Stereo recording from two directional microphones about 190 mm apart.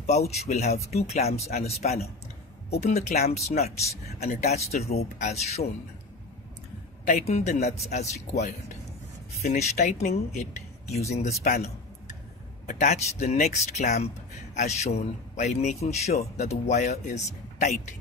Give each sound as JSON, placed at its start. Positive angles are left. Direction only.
{"t": 0.0, "sound": "speech", "side_deg": 35}
{"t": 7.1, "sound": "speech", "side_deg": 40}